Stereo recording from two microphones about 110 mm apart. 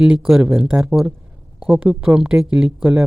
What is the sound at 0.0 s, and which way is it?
Speech, 5° right (ahead or behind).